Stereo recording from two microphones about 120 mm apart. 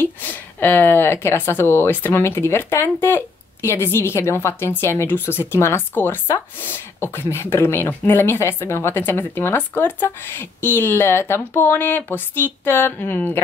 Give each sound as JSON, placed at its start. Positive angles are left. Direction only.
{"t": 0.0, "sound": "speech", "side_deg": 15}